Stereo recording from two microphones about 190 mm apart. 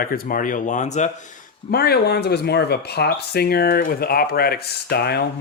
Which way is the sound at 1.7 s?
55° left (ahead or behind).